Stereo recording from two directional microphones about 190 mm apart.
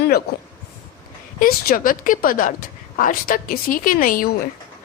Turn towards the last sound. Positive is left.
turn(degrees=45)  # may be behind; listen again after turning